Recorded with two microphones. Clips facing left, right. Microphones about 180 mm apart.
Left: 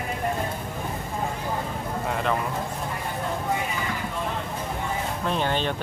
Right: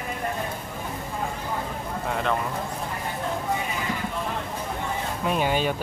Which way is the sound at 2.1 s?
Centre (ahead or behind).